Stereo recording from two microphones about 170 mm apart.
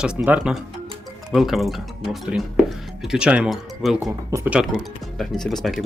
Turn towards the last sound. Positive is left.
turn(degrees=0)  # may be behind; listen again after turning